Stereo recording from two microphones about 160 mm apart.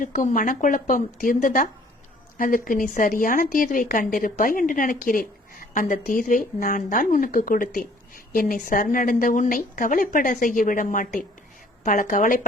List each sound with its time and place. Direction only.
0.0 s speech: 50° left (ahead or behind)